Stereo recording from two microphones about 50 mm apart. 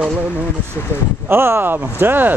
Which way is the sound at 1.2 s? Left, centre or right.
Right.